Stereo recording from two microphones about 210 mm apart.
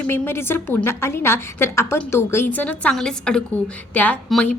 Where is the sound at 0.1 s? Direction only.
10° left (ahead or behind).